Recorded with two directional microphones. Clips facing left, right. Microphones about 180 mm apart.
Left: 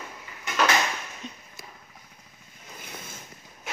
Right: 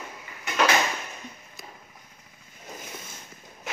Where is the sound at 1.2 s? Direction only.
75° left (ahead or behind).